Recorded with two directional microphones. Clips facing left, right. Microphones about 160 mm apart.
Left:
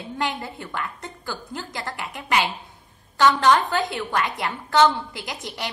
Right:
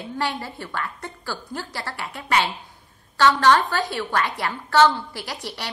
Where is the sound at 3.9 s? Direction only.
15° left (ahead or behind).